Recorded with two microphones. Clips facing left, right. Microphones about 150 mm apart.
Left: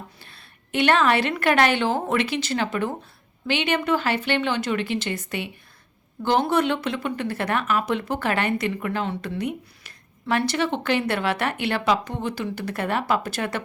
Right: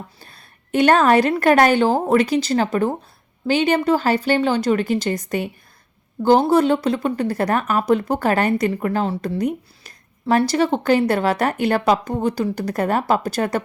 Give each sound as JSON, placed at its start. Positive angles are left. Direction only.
{"t": 0.2, "sound": "speech", "side_deg": -40}